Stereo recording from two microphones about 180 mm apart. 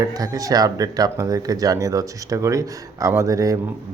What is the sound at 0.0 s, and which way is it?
A man's voice, 20° right (ahead or behind).